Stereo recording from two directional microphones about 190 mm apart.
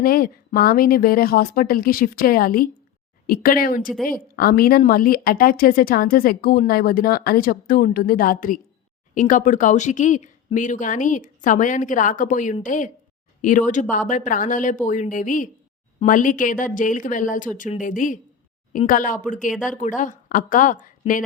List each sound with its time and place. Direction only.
0.0 s speech: 50° left (ahead or behind)